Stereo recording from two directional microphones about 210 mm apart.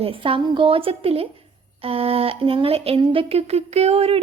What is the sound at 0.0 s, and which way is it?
A woman's voice, 25° right (ahead or behind).